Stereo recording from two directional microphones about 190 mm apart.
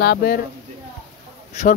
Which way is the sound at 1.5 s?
40° left (ahead or behind).